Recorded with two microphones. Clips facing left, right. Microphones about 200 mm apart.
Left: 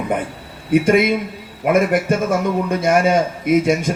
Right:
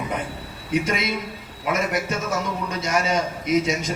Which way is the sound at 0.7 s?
55° left (ahead or behind).